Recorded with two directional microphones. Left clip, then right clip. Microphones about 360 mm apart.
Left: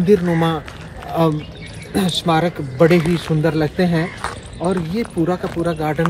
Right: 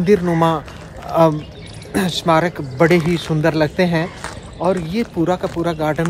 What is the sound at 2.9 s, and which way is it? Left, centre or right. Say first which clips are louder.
Speech: even; centre.